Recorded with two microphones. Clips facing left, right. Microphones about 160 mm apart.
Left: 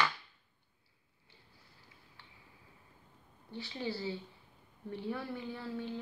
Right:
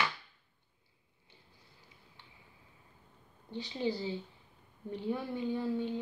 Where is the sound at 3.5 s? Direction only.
20° right (ahead or behind).